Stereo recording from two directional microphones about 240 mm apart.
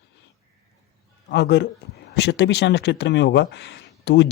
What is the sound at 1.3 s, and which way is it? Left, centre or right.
Speech, left.